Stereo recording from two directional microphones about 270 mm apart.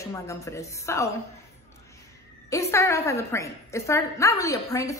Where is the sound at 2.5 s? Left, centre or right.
Centre.